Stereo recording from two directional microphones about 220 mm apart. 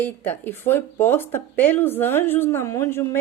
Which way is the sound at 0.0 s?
10° left (ahead or behind).